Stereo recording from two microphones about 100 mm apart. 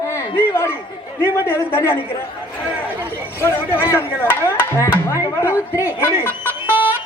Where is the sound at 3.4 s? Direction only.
20° left (ahead or behind).